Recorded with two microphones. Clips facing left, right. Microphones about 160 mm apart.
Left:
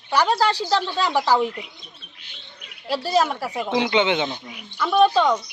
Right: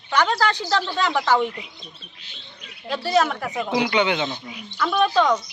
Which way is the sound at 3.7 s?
25° left (ahead or behind).